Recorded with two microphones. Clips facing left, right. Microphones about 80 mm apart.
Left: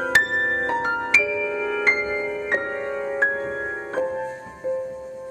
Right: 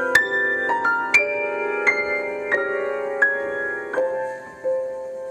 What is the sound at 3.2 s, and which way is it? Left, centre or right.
Music, centre.